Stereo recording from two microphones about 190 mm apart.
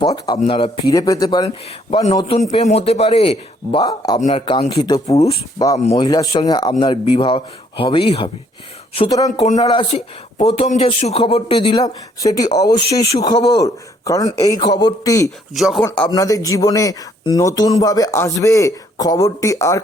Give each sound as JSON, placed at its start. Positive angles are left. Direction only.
{"t": 0.0, "sound": "a man's voice", "side_deg": 20}
{"t": 4.2, "sound": "speech", "side_deg": 35}
{"t": 5.8, "sound": "a man's voice", "side_deg": 35}
{"t": 6.1, "sound": "speech", "side_deg": 20}
{"t": 15.5, "sound": "speech", "side_deg": 0}
{"t": 16.0, "sound": "speech", "side_deg": 20}